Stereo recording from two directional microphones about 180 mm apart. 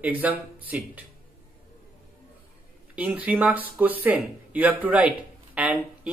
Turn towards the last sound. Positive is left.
turn(degrees=-5)  # may be behind; listen again after turning